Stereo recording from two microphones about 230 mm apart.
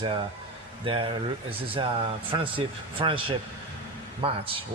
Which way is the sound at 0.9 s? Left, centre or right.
Right.